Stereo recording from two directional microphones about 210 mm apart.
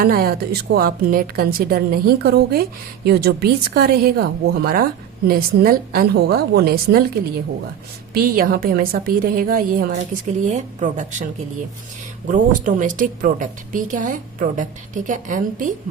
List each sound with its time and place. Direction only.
0.0 s a woman's voice: 45° right (ahead or behind)
12.3 s a woman's voice: 40° right (ahead or behind)